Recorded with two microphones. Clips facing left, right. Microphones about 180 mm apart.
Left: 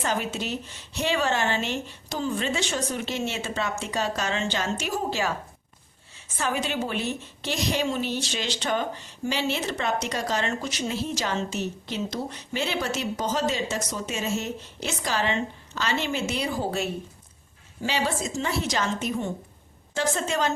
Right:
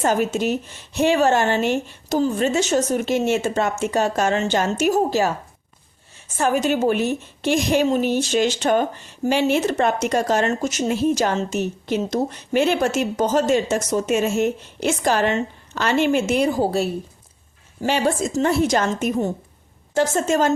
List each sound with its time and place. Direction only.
0.0 s a woman's voice: 45° right (ahead or behind)